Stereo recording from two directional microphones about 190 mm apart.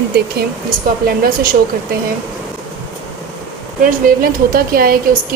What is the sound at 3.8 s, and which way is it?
Speech, 50° right (ahead or behind).